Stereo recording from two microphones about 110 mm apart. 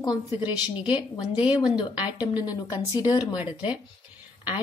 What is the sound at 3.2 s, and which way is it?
Speech, 10° right (ahead or behind).